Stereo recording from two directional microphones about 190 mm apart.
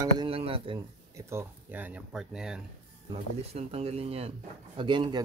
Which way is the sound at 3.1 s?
30° right (ahead or behind).